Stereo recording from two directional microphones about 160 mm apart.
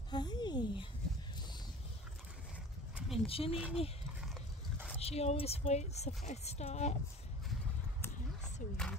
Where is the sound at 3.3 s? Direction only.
35° left (ahead or behind).